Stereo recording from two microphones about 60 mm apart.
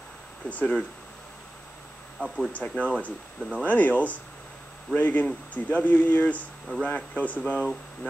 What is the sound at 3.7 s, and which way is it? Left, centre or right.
Speech, left.